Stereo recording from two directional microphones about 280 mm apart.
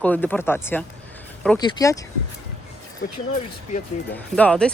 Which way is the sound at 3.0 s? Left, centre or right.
Left.